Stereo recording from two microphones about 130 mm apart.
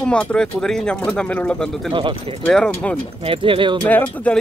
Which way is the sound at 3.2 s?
45° right (ahead or behind).